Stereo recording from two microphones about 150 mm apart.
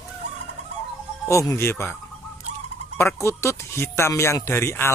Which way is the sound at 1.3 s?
20° left (ahead or behind).